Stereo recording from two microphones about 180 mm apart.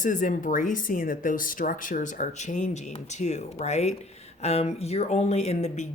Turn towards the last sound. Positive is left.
turn(degrees=40)  # may be behind; listen again after turning